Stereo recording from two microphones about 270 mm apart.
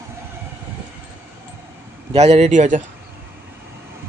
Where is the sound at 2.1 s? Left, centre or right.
Right.